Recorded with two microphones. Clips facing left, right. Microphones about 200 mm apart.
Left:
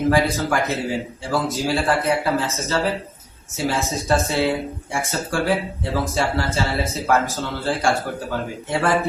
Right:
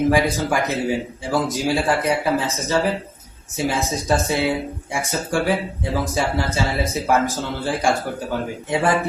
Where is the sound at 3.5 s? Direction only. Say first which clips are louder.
Right 1 dB; 15° right (ahead or behind).